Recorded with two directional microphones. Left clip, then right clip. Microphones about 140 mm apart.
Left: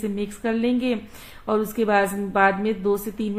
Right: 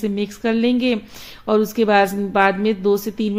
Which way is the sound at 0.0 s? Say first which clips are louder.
Right 5 dB; 35° right (ahead or behind).